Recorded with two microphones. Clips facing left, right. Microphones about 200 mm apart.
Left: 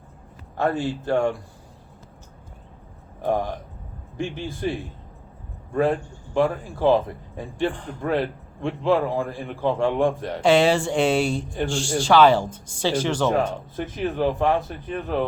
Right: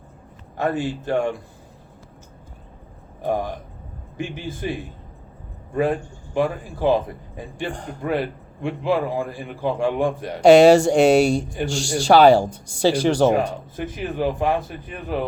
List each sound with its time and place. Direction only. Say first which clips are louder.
0.5 s a man's voice: even; 15° right (ahead or behind)
3.2 s a man's voice: even; 10° right (ahead or behind)
7.7 s speech: right 3 dB; 40° right (ahead or behind)
8.0 s a man's voice: even; 15° right (ahead or behind)
10.4 s speech: right 7 dB; 45° right (ahead or behind)
12.5 s a man's voice: right 2 dB; 10° right (ahead or behind)
13.1 s speech: right 7 dB; 40° right (ahead or behind)
13.3 s a man's voice: right 1 dB; 10° right (ahead or behind)